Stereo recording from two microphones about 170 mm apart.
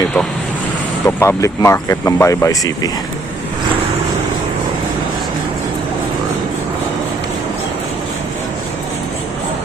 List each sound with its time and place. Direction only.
1.0 s speech: 15° left (ahead or behind)